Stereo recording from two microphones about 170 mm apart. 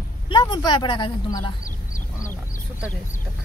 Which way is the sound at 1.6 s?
50° left (ahead or behind).